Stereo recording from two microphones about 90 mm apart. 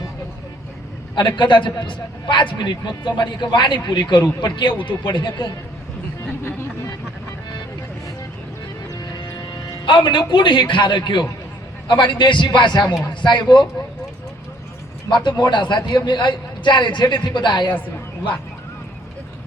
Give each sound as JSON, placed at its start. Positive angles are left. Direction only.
{"t": 1.1, "sound": "a man's voice", "side_deg": 55}
{"t": 9.1, "sound": "a man's voice", "side_deg": 60}
{"t": 15.1, "sound": "a man's voice", "side_deg": 55}
{"t": 17.7, "sound": "speech", "side_deg": 20}